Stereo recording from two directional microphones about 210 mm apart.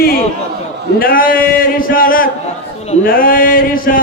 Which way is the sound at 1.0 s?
45° left (ahead or behind).